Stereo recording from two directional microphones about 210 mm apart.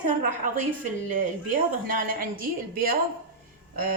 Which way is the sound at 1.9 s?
40° right (ahead or behind).